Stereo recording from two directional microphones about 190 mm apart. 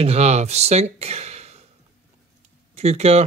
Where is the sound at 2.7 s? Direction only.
35° right (ahead or behind).